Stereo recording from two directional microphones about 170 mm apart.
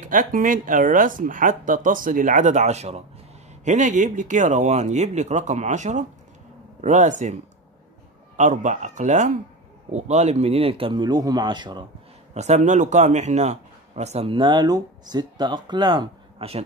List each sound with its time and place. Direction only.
0.0 s speech: 50° right (ahead or behind)
8.4 s a man's voice: 45° right (ahead or behind); by 11.8 s 25° right (ahead or behind)
12.4 s a man's voice: 40° right (ahead or behind)